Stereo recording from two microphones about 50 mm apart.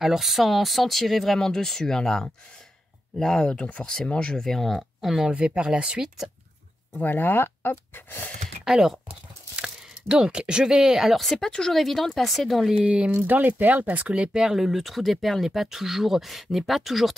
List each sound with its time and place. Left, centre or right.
0.0 s speech: centre
3.5 s speech: left
4.4 s speech: centre
5.3 s speech: right
7.0 s speech: left
8.6 s speech: centre
11.1 s speech: centre
12.7 s speech: right
13.1 s speech: right
14.1 s speech: centre
14.4 s speech: centre